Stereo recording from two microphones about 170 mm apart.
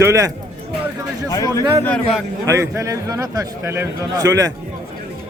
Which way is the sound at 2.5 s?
15° right (ahead or behind).